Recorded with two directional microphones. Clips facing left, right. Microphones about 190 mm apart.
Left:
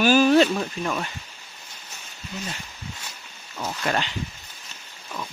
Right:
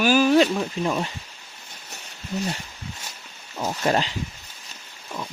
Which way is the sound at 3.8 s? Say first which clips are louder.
Right 4 dB; 35° right (ahead or behind).